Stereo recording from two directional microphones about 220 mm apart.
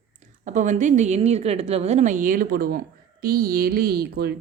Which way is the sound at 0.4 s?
35° right (ahead or behind).